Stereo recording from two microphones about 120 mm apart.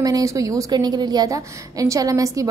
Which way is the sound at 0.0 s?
30° right (ahead or behind).